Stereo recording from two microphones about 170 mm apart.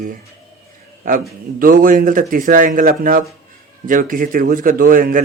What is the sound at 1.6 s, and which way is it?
Speech, 55° right (ahead or behind).